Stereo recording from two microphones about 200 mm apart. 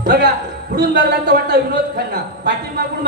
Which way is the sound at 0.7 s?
50° right (ahead or behind).